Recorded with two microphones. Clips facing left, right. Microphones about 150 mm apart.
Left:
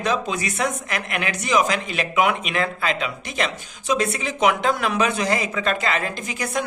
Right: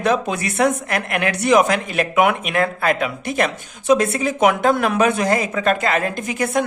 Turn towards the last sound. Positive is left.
turn(degrees=-55)  # may be behind; listen again after turning